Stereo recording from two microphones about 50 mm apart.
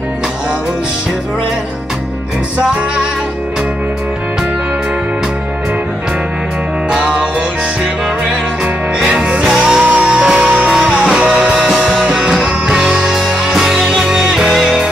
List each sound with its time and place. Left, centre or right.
6.9 s music: centre
9.0 s music: centre
11.6 s music: centre
12.2 s music: centre
13.0 s music: centre